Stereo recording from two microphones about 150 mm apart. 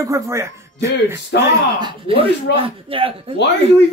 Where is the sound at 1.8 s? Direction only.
35° right (ahead or behind).